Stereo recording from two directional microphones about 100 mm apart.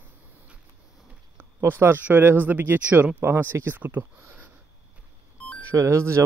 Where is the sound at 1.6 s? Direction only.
20° right (ahead or behind).